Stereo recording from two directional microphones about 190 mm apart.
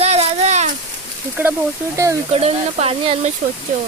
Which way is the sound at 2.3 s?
35° right (ahead or behind).